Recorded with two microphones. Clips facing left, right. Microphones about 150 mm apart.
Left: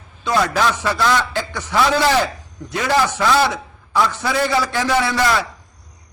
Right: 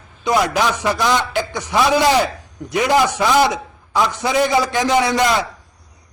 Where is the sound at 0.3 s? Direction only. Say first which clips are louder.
Right 1 dB; 15° right (ahead or behind).